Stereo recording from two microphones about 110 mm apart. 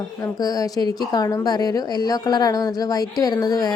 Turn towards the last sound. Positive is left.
turn(degrees=35)  # may be behind; listen again after turning